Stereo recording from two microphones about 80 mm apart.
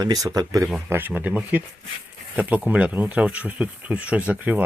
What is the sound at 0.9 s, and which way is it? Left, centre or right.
Speech, right.